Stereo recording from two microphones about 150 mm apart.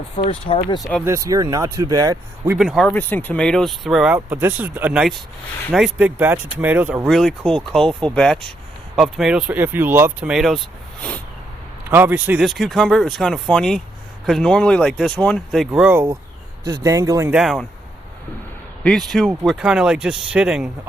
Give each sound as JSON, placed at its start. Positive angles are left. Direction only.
{"t": 0.2, "sound": "speech", "side_deg": 35}
{"t": 0.8, "sound": "speech", "side_deg": 0}
{"t": 1.0, "sound": "speech", "side_deg": -20}
{"t": 2.6, "sound": "speech", "side_deg": 0}
{"t": 2.9, "sound": "speech", "side_deg": 10}
{"t": 11.9, "sound": "speech", "side_deg": -15}
{"t": 16.6, "sound": "speech", "side_deg": -25}
{"t": 17.2, "sound": "speech", "side_deg": -5}
{"t": 18.8, "sound": "speech", "side_deg": 5}